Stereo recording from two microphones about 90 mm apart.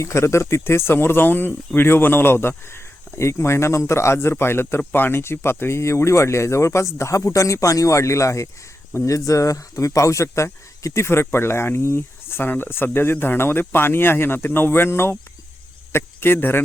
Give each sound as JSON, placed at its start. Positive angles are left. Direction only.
{"t": 0.0, "sound": "speech", "side_deg": 30}